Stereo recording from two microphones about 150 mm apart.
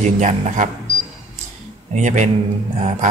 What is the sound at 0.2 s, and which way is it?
Speech, 50° right (ahead or behind).